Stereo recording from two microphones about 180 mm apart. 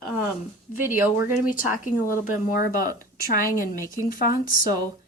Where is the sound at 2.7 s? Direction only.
50° left (ahead or behind).